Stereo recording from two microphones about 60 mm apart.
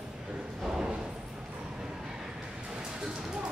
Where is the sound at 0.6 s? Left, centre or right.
Centre.